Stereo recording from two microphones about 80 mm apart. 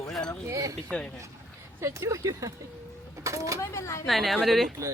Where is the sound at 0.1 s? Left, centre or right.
Centre.